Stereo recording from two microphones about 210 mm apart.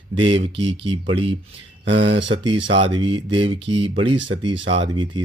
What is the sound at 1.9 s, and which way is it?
Speech, 55° right (ahead or behind).